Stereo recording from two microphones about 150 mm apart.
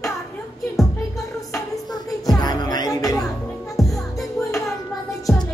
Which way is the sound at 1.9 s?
25° left (ahead or behind).